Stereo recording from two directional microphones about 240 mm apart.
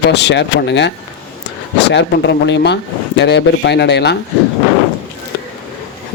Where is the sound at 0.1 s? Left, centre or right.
Left.